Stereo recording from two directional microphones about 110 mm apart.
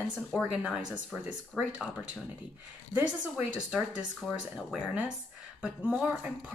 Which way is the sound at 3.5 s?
10° right (ahead or behind).